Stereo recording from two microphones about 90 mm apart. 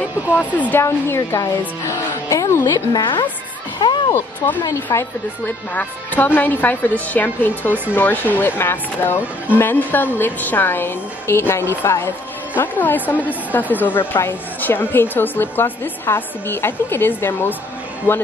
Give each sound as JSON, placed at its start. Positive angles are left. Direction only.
{"t": 0.4, "sound": "speech", "side_deg": 15}
{"t": 0.8, "sound": "a woman's voice", "side_deg": 30}
{"t": 3.8, "sound": "music", "side_deg": 60}
{"t": 4.8, "sound": "a woman's voice", "side_deg": 20}